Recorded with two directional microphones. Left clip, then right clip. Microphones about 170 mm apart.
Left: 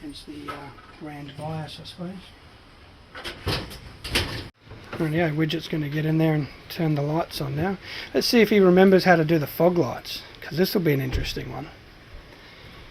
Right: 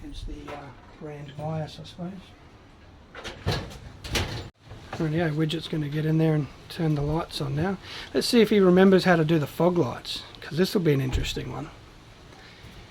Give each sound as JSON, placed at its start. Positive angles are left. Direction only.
{"t": 4.9, "sound": "speech", "side_deg": -5}